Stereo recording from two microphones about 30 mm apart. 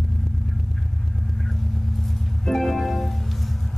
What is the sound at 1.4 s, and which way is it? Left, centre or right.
Vehicle, centre.